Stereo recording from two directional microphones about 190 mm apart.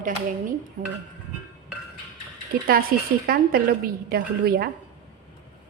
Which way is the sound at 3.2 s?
50° right (ahead or behind).